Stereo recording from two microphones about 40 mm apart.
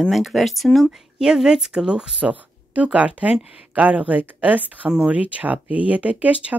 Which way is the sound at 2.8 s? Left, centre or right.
Right.